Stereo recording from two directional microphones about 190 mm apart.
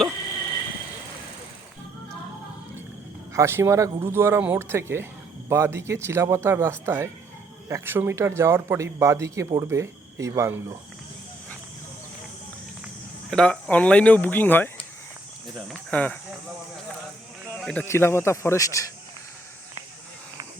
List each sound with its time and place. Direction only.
3.3 s a man's voice: 15° right (ahead or behind)
13.3 s speech: 5° left (ahead or behind)
15.7 s speech: 5° left (ahead or behind)
17.5 s a sound: 5° left (ahead or behind)
17.8 s speech: 15° left (ahead or behind)